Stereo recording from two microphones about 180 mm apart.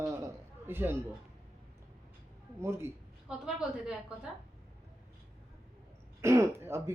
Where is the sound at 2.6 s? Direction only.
15° right (ahead or behind).